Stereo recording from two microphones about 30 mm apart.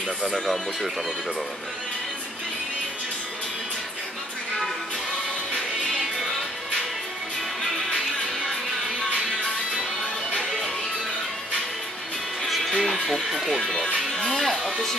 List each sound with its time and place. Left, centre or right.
5.9 s music: centre
12.4 s music: centre
12.7 s speech: centre
14.4 s speech: centre